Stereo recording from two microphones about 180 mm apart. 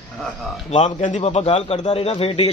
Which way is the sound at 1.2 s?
35° left (ahead or behind).